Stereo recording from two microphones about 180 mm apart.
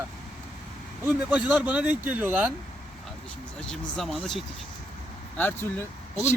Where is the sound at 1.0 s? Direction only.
10° right (ahead or behind).